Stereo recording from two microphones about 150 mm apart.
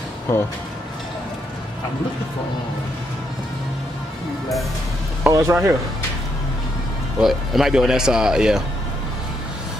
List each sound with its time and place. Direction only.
5.2 s speech: 20° right (ahead or behind)
7.2 s speech: centre (ahead or behind)